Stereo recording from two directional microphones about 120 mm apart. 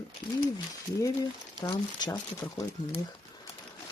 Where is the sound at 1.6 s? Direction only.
35° left (ahead or behind).